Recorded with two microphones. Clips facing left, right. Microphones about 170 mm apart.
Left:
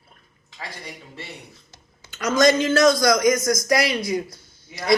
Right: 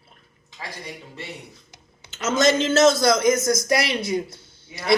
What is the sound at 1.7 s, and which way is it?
Speech, 25° right (ahead or behind).